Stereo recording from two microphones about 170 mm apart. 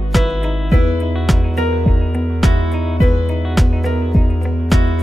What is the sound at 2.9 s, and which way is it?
Music, centre (ahead or behind).